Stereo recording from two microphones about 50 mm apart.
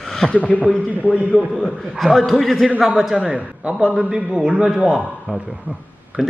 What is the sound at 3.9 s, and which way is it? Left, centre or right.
A man's voice, centre.